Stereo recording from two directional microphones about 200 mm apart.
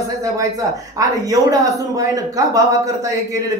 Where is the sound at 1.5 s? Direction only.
15° right (ahead or behind).